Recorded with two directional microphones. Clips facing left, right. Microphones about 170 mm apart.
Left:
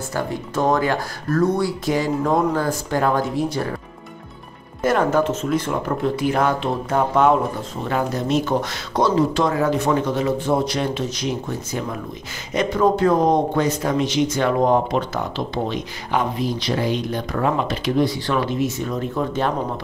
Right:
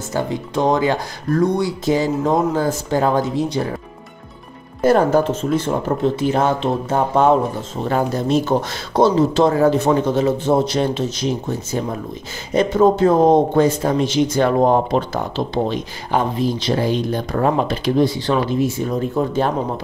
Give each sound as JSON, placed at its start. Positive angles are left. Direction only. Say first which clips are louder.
{"t": 0.1, "sound": "speech", "louder": "right 4 dB", "side_deg": -20}
{"t": 4.8, "sound": "speech", "louder": "right 4 dB", "side_deg": -30}